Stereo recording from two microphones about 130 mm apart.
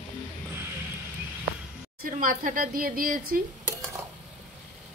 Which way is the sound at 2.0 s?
90° right.